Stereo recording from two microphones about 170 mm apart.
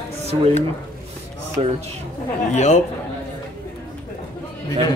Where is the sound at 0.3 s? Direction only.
35° right (ahead or behind).